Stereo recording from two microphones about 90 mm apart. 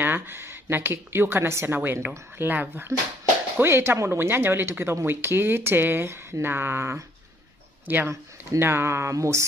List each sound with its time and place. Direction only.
0.0 s speech: 25° right (ahead or behind)